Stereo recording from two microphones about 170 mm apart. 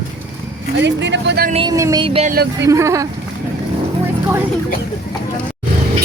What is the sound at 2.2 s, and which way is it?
Speech, 65° right (ahead or behind).